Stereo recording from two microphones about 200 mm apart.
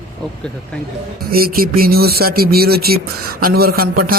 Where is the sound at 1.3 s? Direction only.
50° right (ahead or behind).